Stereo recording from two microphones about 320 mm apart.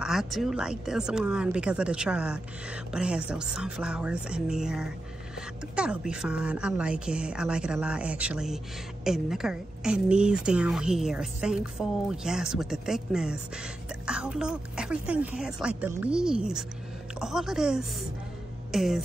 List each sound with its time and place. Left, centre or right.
0.0 s a woman's voice: centre